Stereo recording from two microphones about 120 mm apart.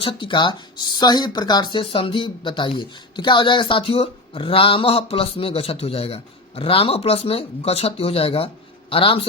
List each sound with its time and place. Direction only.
0.0 s speech: 45° left (ahead or behind)